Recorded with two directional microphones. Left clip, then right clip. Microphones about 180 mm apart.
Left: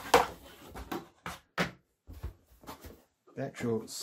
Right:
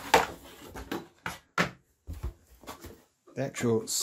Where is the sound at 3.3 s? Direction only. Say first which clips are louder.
Right 5 dB; 40° right (ahead or behind).